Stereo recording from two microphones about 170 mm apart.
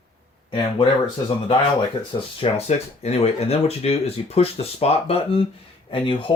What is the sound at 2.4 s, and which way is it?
Speech, 35° left (ahead or behind).